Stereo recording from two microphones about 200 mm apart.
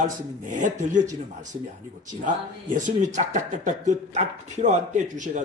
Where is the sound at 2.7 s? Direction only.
40° right (ahead or behind).